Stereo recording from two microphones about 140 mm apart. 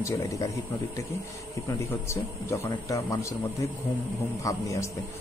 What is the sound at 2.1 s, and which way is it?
Speech, 20° left (ahead or behind).